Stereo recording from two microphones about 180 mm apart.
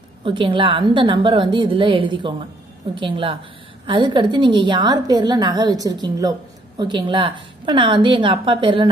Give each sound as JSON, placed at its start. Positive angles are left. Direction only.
{"t": 0.2, "sound": "a woman's voice", "side_deg": -30}